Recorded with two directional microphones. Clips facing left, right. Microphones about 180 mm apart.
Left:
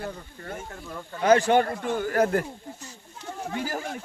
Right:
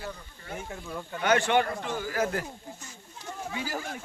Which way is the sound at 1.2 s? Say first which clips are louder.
Left 5 dB; 35° left (ahead or behind).